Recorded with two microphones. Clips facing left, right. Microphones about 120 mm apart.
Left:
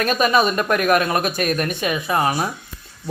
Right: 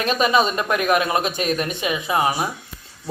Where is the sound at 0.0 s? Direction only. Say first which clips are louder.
Left 1 dB; 20° right (ahead or behind).